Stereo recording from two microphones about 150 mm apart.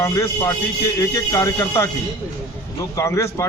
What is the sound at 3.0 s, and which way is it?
Speech, 20° left (ahead or behind).